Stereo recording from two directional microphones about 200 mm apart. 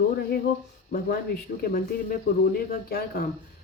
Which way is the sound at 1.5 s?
45° left (ahead or behind).